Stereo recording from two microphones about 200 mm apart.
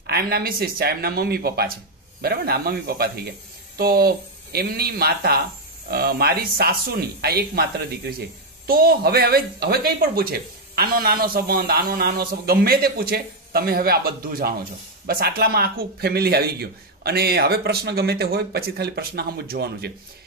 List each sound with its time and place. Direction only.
0.0 s speech: 50° right (ahead or behind)